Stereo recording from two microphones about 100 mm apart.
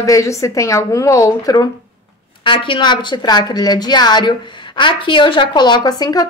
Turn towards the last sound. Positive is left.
turn(degrees=40)  # may be behind; listen again after turning